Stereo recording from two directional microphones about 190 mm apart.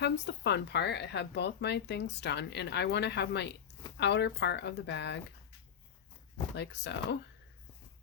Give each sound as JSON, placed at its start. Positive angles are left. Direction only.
{"t": 0.0, "sound": "speech", "side_deg": 65}
{"t": 6.6, "sound": "speech", "side_deg": 65}